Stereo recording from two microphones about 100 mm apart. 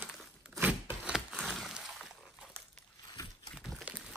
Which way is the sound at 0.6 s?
20° right (ahead or behind).